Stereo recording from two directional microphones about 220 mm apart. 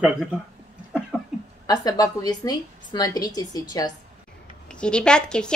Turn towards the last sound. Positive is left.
turn(degrees=5)  # may be behind; listen again after turning